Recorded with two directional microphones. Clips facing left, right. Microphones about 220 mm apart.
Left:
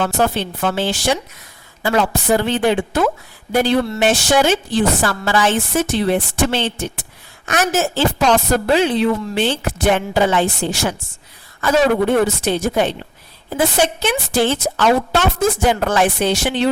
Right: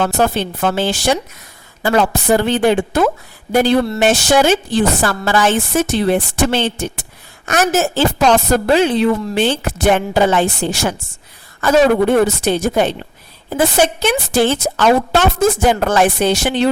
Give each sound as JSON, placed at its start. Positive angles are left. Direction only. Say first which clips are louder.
{"t": 0.0, "sound": "a woman's voice", "louder": "right 2 dB", "side_deg": -45}